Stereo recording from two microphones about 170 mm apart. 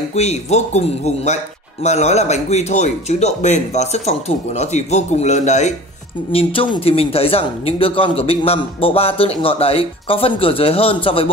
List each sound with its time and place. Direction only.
0.1 s speech: 40° left (ahead or behind)
6.3 s speech: 30° left (ahead or behind)